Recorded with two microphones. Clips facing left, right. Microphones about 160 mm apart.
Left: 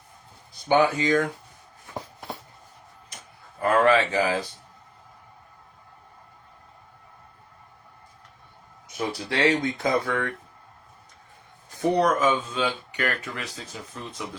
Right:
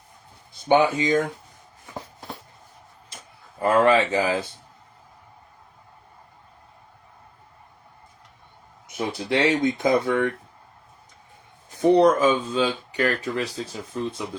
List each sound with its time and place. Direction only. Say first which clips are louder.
0.9 s speech: right 1 dB; 20° right (ahead or behind)
3.6 s speech: right 2 dB; 25° right (ahead or behind)
8.9 s speech: right 4 dB; 20° right (ahead or behind)
11.8 s speech: right 5 dB; 30° right (ahead or behind)